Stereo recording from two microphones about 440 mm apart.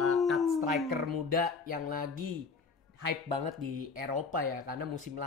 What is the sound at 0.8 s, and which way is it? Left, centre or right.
Speech, right.